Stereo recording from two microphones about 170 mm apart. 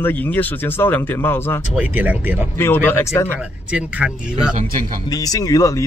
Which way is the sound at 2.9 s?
15° left (ahead or behind).